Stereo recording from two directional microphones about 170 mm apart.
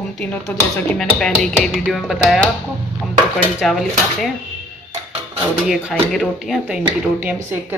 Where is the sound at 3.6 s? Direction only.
Centre (ahead or behind).